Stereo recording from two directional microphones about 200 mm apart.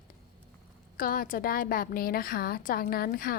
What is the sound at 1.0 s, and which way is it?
A woman's voice, 45° left (ahead or behind).